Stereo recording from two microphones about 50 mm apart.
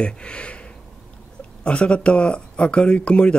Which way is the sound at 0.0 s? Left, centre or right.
Centre.